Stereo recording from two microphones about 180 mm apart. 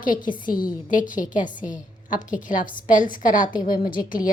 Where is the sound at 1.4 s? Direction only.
45° left (ahead or behind).